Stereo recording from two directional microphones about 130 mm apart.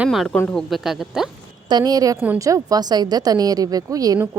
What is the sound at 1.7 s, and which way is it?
Speech, 30° right (ahead or behind).